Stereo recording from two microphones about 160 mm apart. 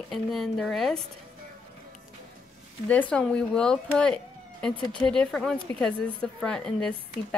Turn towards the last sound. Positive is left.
turn(degrees=5)  # may be behind; listen again after turning